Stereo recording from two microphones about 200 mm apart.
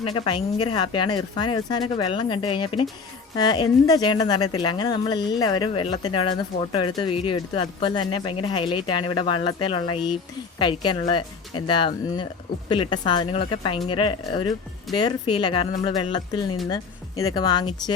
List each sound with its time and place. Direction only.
0.0 s speech: 25° left (ahead or behind)